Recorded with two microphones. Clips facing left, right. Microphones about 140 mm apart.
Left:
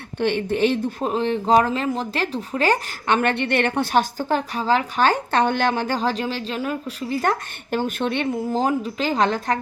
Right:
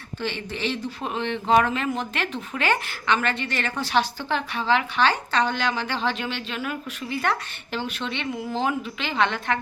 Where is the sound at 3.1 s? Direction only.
55° left (ahead or behind).